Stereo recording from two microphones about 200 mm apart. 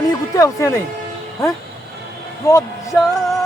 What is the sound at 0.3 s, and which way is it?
Speech, 15° left (ahead or behind).